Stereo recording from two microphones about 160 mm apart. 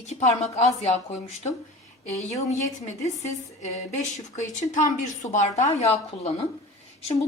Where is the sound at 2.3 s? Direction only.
45° left (ahead or behind).